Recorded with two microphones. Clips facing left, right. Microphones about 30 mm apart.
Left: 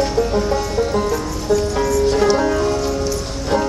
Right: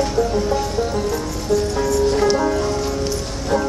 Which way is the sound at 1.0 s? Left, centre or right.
Left.